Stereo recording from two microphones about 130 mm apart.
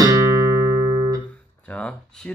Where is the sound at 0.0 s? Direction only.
25° right (ahead or behind).